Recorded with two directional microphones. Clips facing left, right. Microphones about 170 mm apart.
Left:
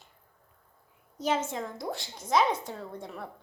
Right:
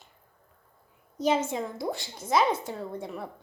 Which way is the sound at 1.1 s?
15° right (ahead or behind).